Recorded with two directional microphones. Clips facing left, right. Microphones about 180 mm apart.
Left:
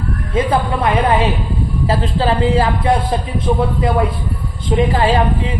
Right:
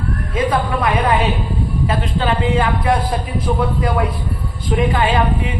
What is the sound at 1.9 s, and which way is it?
Speech, 30° left (ahead or behind).